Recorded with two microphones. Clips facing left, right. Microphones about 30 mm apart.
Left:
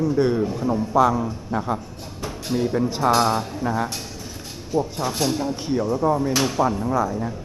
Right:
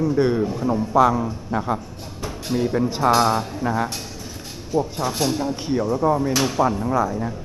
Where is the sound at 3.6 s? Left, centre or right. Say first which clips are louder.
Right 1 dB; centre.